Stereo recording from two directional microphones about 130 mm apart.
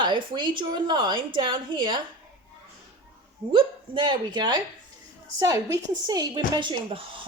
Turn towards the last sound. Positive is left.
turn(degrees=-40)  # may be behind; listen again after turning